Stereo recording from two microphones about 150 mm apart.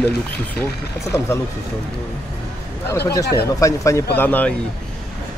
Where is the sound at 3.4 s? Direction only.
20° left (ahead or behind).